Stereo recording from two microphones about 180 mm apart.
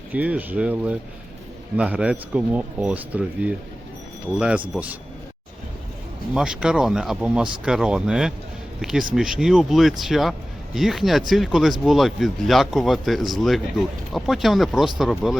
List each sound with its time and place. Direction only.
0.1 s speech: 10° right (ahead or behind)
6.3 s speech: 5° right (ahead or behind)